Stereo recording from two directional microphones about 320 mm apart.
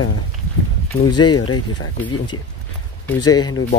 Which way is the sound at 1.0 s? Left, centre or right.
Centre.